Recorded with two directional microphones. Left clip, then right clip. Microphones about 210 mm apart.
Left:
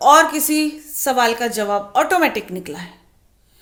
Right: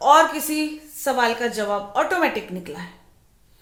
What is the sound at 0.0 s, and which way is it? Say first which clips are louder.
A woman's voice: left 3 dB; 45° left (ahead or behind).